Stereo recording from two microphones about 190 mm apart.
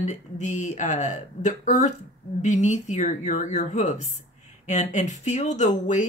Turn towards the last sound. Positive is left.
turn(degrees=40)  # may be behind; listen again after turning